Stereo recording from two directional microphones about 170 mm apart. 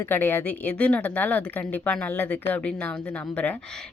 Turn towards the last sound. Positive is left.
turn(degrees=10)  # may be behind; listen again after turning